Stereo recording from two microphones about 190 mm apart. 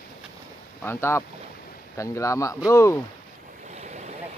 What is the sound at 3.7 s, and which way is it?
Waves, 35° right (ahead or behind).